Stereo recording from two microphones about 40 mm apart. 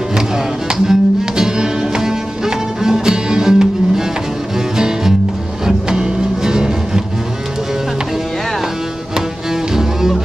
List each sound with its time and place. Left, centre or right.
0.7 s music: centre
9.1 s music: centre